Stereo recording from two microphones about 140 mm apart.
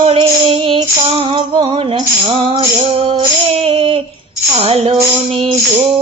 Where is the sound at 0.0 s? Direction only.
40° right (ahead or behind).